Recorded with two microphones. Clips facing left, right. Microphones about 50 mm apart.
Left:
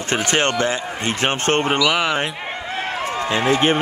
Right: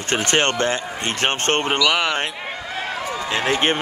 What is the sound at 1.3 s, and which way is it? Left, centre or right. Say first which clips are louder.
Speech: left 2 dB; right.